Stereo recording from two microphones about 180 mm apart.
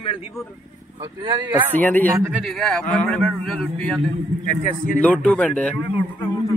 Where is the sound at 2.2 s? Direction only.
5° right (ahead or behind).